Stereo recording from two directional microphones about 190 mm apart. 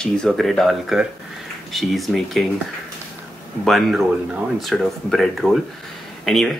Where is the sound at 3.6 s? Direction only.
Centre (ahead or behind).